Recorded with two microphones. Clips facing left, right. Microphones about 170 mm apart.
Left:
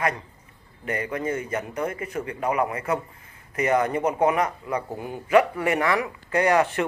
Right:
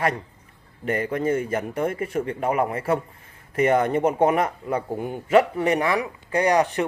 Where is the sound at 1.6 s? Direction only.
50° right (ahead or behind).